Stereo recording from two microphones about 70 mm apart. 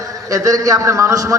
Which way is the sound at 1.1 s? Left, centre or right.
Right.